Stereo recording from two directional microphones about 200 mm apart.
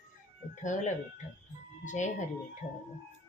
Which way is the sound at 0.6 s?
40° left (ahead or behind).